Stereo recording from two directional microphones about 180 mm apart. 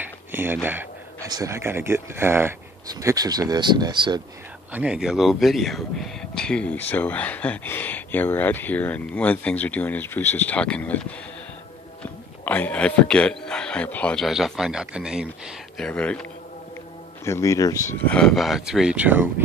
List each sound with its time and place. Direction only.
0.3 s speech: 10° right (ahead or behind)
0.7 s a sound: 10° right (ahead or behind)
1.3 s speech: 15° right (ahead or behind)
4.7 s speech: 5° right (ahead or behind)
15.9 s speech: 5° left (ahead or behind)
17.8 s speech: 5° left (ahead or behind)